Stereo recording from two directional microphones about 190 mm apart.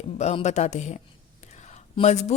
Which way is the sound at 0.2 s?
35° left (ahead or behind).